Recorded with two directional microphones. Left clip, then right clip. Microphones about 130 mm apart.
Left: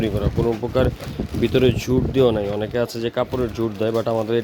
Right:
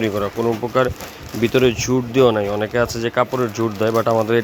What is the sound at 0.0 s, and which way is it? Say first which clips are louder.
Speech: right 2 dB; 25° left (ahead or behind).